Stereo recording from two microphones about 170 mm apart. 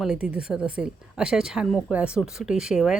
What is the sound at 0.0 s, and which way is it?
Speech, 5° right (ahead or behind).